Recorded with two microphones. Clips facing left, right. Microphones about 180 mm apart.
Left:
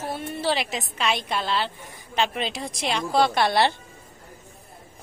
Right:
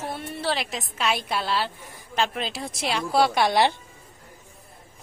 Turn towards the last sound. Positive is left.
turn(degrees=-15)  # may be behind; listen again after turning